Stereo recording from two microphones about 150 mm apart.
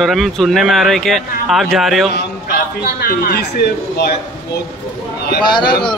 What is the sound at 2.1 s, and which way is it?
A man's voice, 90° left.